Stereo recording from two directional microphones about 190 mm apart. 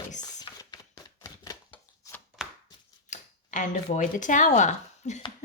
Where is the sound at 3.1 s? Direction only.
40° left (ahead or behind).